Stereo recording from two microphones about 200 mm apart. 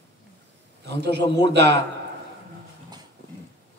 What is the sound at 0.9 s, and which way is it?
Speech, 55° right (ahead or behind).